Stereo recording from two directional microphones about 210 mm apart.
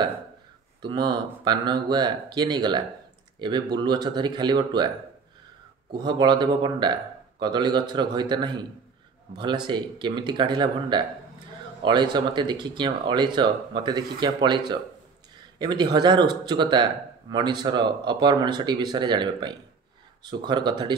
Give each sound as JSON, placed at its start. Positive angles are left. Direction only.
{"t": 0.8, "sound": "speech", "side_deg": -20}
{"t": 5.9, "sound": "speech", "side_deg": -20}